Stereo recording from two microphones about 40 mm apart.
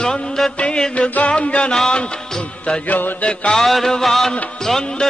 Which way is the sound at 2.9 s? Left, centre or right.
Left.